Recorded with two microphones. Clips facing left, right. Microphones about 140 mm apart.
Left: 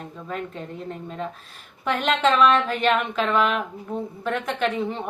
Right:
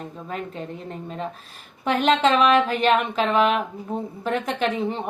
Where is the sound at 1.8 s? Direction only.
30° right (ahead or behind).